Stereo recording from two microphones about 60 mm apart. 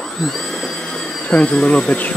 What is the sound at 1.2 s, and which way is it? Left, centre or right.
Speech, centre.